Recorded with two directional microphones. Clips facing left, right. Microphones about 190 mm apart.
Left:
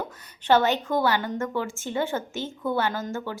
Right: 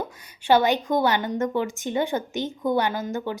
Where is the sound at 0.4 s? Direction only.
10° right (ahead or behind).